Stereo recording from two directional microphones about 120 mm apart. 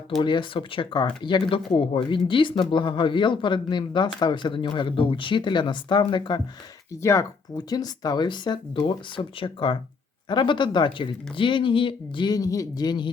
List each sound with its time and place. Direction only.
0.2 s speech: 40° left (ahead or behind)
7.0 s speech: 25° left (ahead or behind)